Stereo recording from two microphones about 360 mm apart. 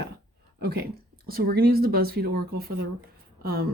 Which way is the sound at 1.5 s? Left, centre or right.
Right.